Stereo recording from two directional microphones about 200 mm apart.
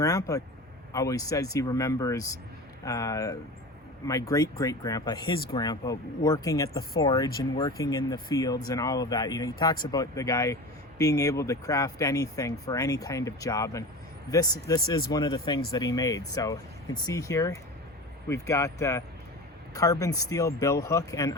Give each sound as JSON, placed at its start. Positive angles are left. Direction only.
{"t": 0.0, "sound": "speech", "side_deg": 15}